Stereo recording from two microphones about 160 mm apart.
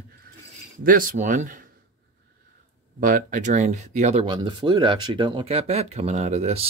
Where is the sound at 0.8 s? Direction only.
60° right (ahead or behind).